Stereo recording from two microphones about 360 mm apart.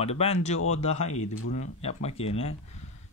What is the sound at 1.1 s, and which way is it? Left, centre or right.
Speech, left.